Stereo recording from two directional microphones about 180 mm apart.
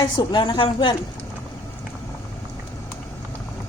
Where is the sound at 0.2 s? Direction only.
25° left (ahead or behind).